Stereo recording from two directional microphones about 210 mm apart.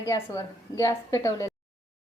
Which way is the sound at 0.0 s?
15° left (ahead or behind).